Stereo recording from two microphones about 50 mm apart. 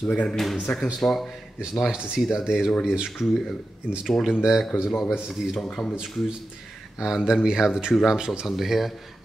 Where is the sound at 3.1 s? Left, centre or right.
Centre.